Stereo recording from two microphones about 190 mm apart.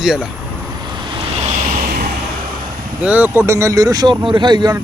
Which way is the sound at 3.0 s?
10° right (ahead or behind).